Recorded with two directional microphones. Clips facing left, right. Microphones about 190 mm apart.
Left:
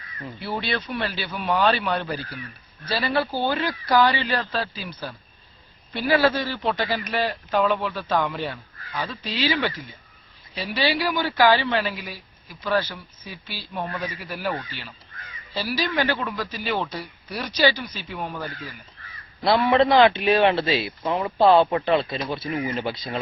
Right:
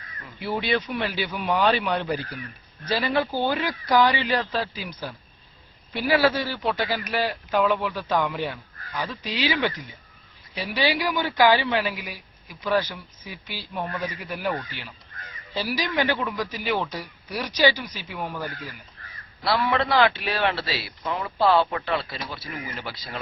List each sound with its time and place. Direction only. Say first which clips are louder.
0.3 s a man's voice: right 3 dB; 15° right (ahead or behind)
19.4 s a man's voice: left 5 dB; 25° left (ahead or behind)